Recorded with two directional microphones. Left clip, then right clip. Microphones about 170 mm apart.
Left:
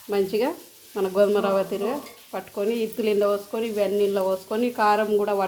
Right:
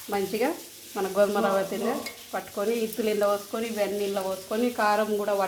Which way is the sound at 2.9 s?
30° left (ahead or behind).